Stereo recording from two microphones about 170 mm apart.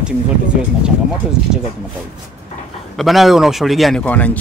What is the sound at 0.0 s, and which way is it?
Speech, 5° right (ahead or behind).